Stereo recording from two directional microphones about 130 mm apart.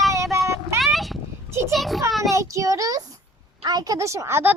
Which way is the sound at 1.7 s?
Centre (ahead or behind).